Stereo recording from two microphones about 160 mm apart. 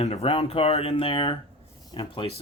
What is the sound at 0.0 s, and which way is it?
Speech, 40° left (ahead or behind).